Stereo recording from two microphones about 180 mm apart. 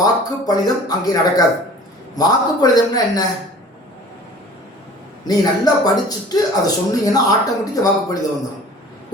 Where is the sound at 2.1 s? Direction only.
20° left (ahead or behind).